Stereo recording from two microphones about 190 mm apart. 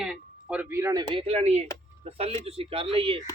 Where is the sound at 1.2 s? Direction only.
35° right (ahead or behind).